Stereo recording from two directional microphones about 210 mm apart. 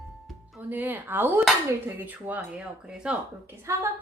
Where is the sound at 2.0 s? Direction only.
10° right (ahead or behind).